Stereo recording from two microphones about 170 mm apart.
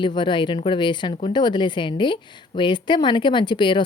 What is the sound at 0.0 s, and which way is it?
A woman's voice, 25° left (ahead or behind).